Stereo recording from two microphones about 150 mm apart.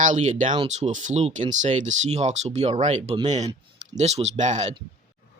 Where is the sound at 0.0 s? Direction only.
55° right (ahead or behind).